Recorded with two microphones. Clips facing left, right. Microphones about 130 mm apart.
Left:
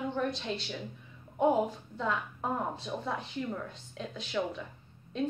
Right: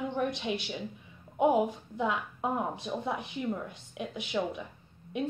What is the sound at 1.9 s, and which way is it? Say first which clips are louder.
A woman's voice: right 1 dB; 15° right (ahead or behind).